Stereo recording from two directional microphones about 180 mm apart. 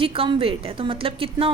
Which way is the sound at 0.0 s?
30° right (ahead or behind).